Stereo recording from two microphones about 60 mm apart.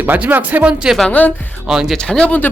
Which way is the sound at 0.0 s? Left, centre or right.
Right.